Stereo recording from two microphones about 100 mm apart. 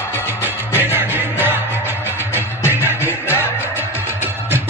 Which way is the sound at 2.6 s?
20° right (ahead or behind).